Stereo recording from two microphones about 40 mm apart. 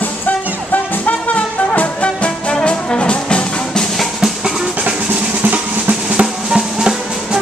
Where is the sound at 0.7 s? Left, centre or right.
Left.